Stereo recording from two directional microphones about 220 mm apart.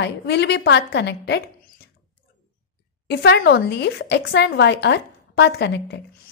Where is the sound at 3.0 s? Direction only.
50° left (ahead or behind).